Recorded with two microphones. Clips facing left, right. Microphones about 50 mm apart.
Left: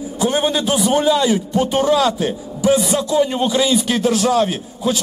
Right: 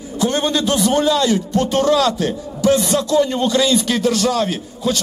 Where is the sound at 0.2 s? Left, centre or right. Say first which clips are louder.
Even; centre.